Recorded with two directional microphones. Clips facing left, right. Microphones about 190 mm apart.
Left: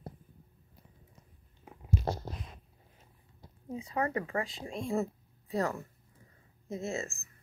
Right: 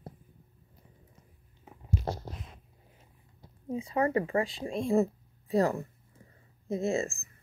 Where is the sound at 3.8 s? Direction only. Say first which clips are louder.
Right 5 dB; 25° right (ahead or behind).